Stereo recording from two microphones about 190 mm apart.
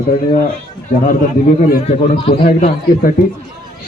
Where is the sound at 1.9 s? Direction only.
30° left (ahead or behind).